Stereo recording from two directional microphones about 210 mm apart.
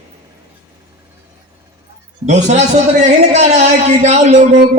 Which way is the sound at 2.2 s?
30° right (ahead or behind).